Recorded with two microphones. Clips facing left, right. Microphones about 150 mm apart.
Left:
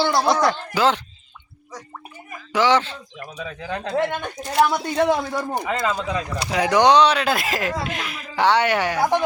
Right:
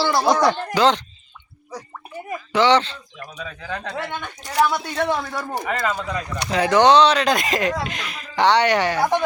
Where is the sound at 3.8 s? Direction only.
5° left (ahead or behind).